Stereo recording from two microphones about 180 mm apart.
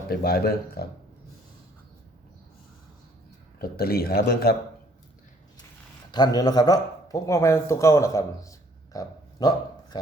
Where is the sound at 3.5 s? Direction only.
60° left (ahead or behind).